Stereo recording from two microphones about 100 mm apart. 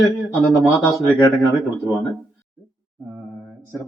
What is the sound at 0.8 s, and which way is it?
Speech, 30° left (ahead or behind).